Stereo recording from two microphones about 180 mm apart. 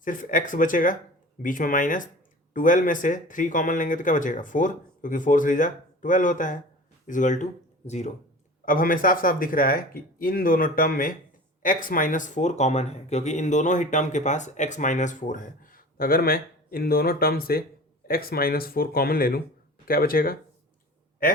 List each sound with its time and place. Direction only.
0.0 s speech: 45° left (ahead or behind)
8.6 s speech: 50° left (ahead or behind)